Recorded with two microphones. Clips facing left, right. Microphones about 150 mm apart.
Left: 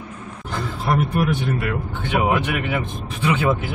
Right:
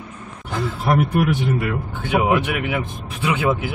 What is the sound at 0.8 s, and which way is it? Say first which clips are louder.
Speech: right 2 dB; 85° right.